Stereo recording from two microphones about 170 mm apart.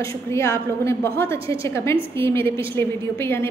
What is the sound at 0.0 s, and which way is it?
A woman's voice, 15° left (ahead or behind).